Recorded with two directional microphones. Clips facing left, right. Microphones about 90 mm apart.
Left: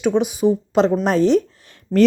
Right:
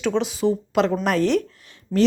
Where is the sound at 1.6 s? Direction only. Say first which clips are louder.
Left 5 dB; 45° left (ahead or behind).